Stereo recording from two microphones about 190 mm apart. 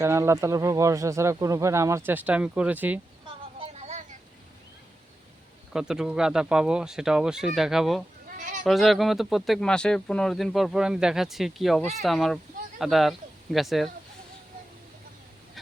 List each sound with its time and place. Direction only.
0.0 s speech: 15° right (ahead or behind)
3.6 s vehicle: 35° right (ahead or behind)
5.7 s speech: 5° right (ahead or behind)
8.4 s sheep: 45° right (ahead or behind)
8.6 s speech: centre (ahead or behind)